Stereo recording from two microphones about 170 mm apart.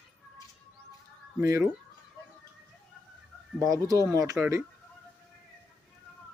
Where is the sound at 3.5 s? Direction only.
20° right (ahead or behind).